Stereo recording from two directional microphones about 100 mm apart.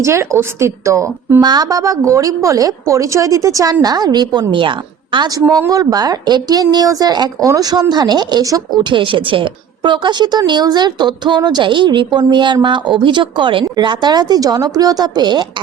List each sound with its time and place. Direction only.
0.0 s a woman's voice: 30° right (ahead or behind)
8.9 s a woman's voice: 60° right (ahead or behind)